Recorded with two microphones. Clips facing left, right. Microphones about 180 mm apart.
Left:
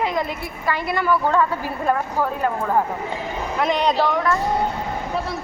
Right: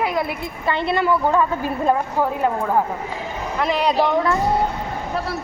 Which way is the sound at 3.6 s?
5° right (ahead or behind).